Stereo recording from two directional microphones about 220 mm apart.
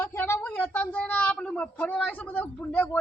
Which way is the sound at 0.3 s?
5° left (ahead or behind).